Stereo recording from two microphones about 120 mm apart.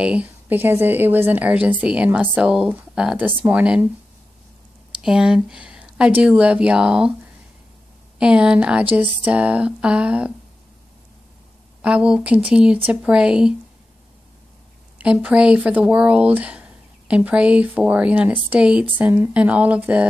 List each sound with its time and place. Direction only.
0.0 s speech: 10° right (ahead or behind)
5.0 s speech: 5° right (ahead or behind)
8.2 s speech: 10° right (ahead or behind)
11.8 s speech: 10° right (ahead or behind)
15.0 s speech: 10° right (ahead or behind)